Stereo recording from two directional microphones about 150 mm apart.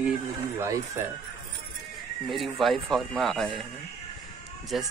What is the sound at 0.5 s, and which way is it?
Speech, 20° right (ahead or behind).